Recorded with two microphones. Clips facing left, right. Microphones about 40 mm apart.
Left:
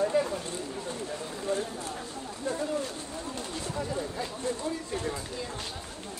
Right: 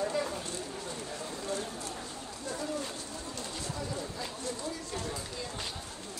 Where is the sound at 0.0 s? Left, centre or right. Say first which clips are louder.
Left 6 dB; centre.